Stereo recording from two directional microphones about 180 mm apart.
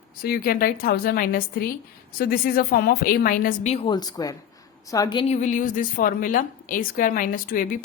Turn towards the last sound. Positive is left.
turn(degrees=50)  # may be behind; listen again after turning